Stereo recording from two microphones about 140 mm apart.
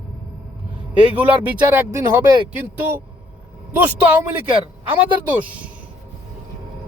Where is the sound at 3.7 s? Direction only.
10° right (ahead or behind).